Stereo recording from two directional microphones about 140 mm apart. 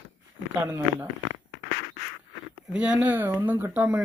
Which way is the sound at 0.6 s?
15° right (ahead or behind).